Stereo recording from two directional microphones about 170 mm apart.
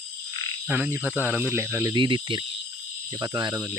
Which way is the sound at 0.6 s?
10° right (ahead or behind).